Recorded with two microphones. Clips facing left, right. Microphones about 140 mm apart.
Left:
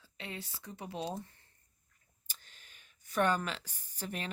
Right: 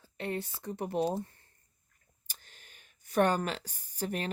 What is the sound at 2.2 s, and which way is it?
Speech, 45° right (ahead or behind).